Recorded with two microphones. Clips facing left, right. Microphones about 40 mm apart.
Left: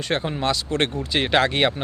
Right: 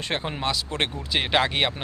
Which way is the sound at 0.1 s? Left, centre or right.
Centre.